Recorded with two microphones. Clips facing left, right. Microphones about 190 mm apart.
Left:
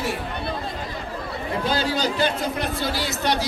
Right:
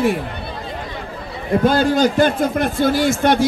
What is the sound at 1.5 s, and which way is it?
A man's voice, 50° right (ahead or behind).